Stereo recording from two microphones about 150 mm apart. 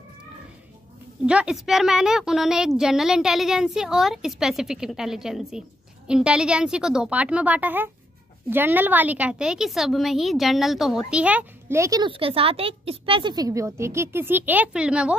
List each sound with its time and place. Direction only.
1.2 s a woman's voice: 5° right (ahead or behind)
11.8 s speech: 25° right (ahead or behind)
12.1 s speech: 40° right (ahead or behind); by 15.1 s 5° right (ahead or behind)